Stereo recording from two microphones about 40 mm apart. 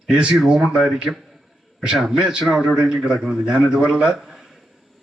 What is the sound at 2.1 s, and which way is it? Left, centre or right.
A man's voice, centre.